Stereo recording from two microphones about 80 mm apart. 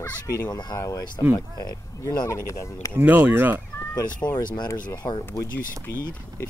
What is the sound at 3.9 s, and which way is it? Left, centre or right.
Speech, left.